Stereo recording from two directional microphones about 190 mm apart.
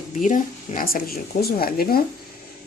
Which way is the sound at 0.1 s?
40° left (ahead or behind).